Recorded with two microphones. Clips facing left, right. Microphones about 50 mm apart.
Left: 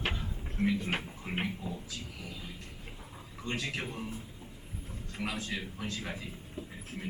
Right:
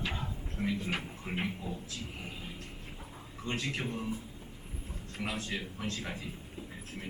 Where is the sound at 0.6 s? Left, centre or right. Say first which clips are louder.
Left 3 dB; left.